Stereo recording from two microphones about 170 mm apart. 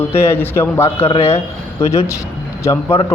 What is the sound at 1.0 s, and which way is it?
Speech, 40° left (ahead or behind).